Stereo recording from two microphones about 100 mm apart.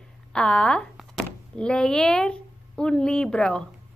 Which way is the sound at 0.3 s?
10° left (ahead or behind).